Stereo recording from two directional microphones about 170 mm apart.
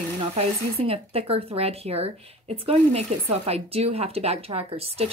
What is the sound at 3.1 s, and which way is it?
Speech, 40° right (ahead or behind).